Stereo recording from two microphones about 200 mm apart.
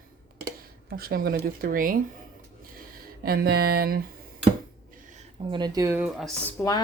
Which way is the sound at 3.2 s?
50° right (ahead or behind).